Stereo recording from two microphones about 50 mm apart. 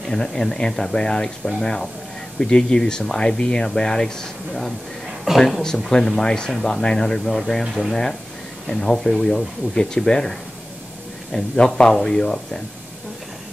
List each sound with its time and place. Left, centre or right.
0.1 s speech: centre
5.3 s speech: centre
5.9 s speech: centre
8.6 s speech: centre
11.3 s speech: centre